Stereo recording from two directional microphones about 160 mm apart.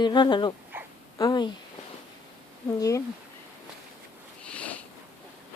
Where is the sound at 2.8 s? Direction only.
20° left (ahead or behind).